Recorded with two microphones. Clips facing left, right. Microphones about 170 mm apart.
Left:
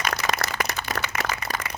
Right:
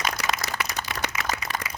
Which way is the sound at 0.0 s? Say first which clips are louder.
Left 2 dB; 55° left (ahead or behind).